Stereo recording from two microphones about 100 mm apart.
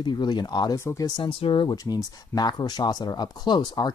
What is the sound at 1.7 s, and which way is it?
Speech, 40° left (ahead or behind).